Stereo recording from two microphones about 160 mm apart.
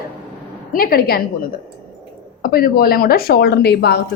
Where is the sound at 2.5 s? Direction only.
70° left (ahead or behind); by 4.0 s 90° left.